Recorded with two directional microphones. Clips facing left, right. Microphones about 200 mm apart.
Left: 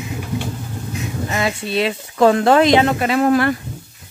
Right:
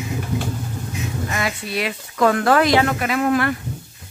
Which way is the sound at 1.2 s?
25° left (ahead or behind).